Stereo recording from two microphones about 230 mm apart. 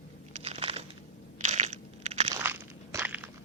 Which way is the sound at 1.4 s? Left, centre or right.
Right.